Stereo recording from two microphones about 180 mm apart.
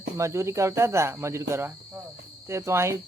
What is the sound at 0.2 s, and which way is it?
Cricket, 15° right (ahead or behind).